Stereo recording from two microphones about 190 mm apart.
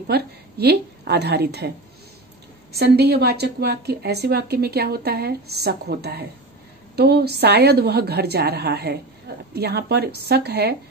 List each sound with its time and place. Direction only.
0.0 s a woman's voice: 55° right (ahead or behind)
2.7 s a woman's voice: 60° right (ahead or behind)